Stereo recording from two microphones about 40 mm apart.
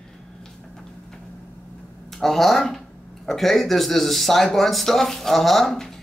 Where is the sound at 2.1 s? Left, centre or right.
Centre.